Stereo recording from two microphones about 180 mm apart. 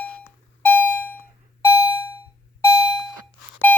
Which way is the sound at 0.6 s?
10° left (ahead or behind).